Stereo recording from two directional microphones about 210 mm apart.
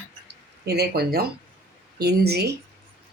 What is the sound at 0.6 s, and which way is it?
Speech, 50° right (ahead or behind).